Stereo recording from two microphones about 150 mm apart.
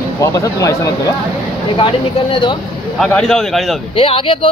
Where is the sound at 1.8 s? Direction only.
35° left (ahead or behind).